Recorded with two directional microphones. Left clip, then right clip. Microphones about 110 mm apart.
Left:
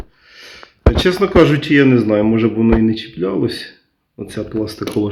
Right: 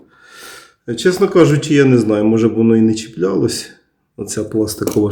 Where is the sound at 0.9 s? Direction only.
15° left (ahead or behind).